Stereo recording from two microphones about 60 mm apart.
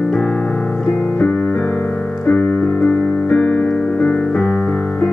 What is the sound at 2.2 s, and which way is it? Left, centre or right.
Piano, left.